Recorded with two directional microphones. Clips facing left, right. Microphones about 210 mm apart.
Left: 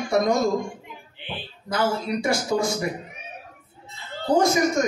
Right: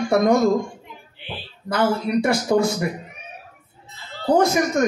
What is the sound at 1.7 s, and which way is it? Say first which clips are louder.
Speech: right 4 dB; 60° right (ahead or behind).